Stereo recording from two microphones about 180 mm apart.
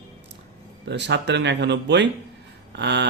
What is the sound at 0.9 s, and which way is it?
Speech, 75° right (ahead or behind).